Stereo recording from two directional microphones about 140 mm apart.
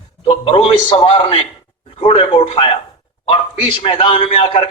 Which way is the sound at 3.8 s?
35° left (ahead or behind).